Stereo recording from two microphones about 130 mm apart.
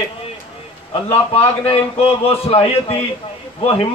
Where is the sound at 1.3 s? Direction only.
45° left (ahead or behind).